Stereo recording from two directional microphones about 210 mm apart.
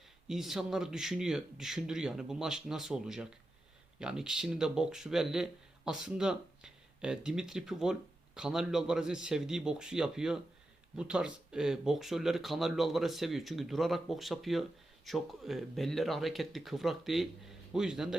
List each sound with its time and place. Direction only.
0.3 s speech: centre (ahead or behind)